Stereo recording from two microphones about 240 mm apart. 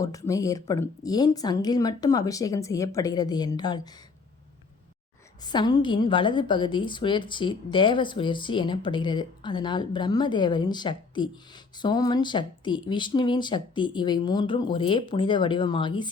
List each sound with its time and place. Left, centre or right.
0.0 s speech: centre
5.4 s a woman's voice: centre